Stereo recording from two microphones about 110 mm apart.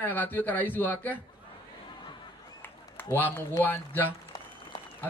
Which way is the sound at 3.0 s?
15° left (ahead or behind).